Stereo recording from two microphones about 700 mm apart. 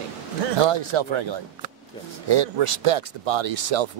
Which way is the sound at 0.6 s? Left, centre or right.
Right.